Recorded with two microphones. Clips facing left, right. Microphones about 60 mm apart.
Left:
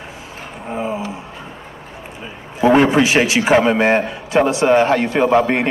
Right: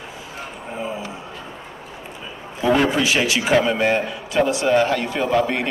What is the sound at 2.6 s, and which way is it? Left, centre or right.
A man's voice, left.